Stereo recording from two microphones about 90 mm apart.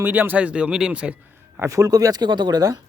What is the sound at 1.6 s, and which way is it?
Speech, 35° right (ahead or behind).